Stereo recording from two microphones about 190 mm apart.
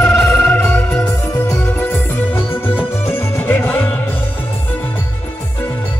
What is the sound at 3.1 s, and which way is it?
Music, 10° left (ahead or behind).